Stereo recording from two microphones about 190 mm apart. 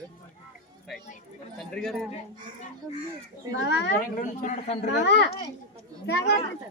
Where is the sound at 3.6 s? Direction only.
65° left (ahead or behind).